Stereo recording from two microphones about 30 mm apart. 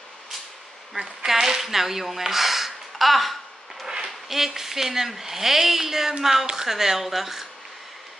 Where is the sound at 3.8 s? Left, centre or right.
Centre.